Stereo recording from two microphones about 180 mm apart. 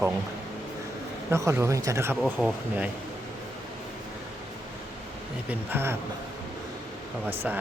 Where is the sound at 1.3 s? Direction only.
15° right (ahead or behind).